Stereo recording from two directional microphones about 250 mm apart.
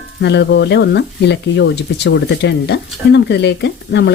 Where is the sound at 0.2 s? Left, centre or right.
Left.